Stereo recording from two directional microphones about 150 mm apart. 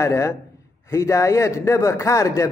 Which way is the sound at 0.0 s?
20° left (ahead or behind).